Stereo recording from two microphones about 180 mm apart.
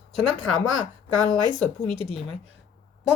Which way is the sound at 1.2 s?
20° right (ahead or behind).